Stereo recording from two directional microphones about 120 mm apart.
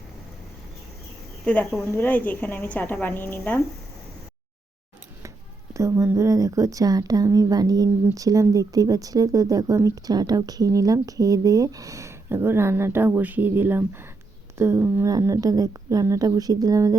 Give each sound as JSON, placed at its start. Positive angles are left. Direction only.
{"t": 1.5, "sound": "a woman's voice", "side_deg": 10}
{"t": 5.7, "sound": "a woman's voice", "side_deg": -25}